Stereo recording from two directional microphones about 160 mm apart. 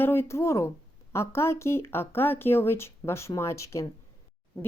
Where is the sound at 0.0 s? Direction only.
15° left (ahead or behind).